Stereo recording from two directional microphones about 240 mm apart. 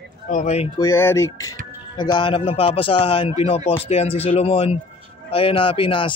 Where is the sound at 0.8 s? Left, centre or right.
Centre.